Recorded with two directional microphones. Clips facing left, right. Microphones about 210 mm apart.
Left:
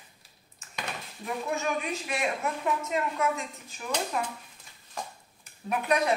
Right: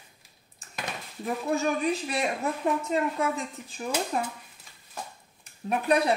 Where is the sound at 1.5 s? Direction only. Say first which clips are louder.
Right 6 dB; 35° right (ahead or behind).